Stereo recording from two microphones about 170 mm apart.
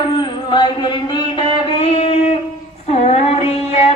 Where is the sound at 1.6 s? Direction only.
35° left (ahead or behind).